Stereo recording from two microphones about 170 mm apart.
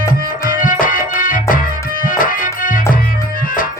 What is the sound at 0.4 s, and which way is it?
Music, 55° left (ahead or behind).